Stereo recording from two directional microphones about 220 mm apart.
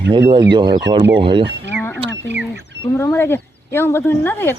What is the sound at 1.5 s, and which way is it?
Speech, 50° right (ahead or behind).